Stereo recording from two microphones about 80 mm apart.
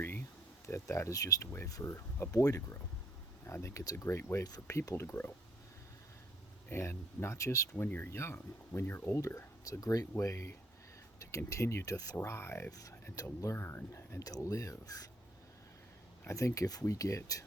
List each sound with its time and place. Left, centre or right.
0.7 s speech: left
2.3 s speech: left
3.4 s speech: left
6.7 s speech: left
7.9 s speech: left
9.2 s speech: left
12.1 s speech: left
16.2 s speech: left